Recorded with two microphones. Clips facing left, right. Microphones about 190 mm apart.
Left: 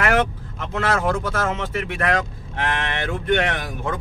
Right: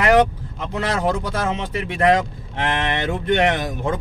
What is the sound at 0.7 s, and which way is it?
Speech, 15° right (ahead or behind).